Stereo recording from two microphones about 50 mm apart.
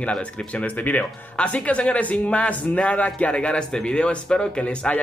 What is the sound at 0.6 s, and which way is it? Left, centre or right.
Speech, left.